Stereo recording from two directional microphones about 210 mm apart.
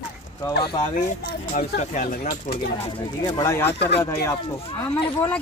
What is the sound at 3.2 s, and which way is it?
Speech, 15° left (ahead or behind).